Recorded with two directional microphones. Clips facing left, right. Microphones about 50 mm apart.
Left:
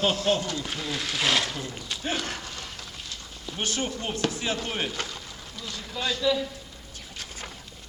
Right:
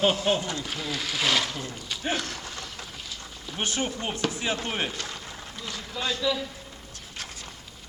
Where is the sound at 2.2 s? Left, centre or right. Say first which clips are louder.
Left 1 dB; left.